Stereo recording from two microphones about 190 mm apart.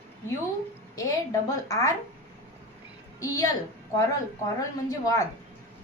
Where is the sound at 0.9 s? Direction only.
15° left (ahead or behind).